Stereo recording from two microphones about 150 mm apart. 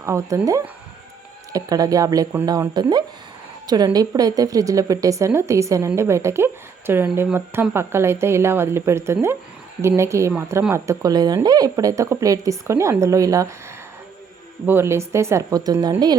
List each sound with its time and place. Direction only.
0.0 s a woman's voice: 20° right (ahead or behind)
14.7 s a woman's voice: 15° right (ahead or behind)